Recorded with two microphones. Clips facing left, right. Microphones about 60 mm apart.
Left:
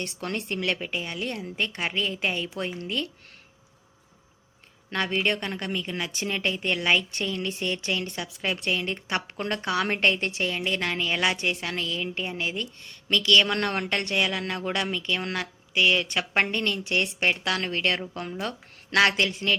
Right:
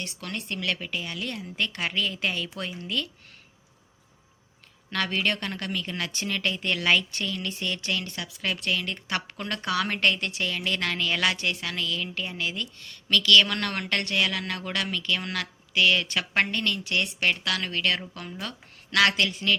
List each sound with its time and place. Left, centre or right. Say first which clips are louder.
0.0 s a woman's voice: left 4 dB; left
4.9 s a woman's voice: left 1 dB; left